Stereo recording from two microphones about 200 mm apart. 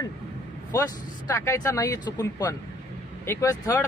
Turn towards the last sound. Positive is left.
turn(degrees=15)  # may be behind; listen again after turning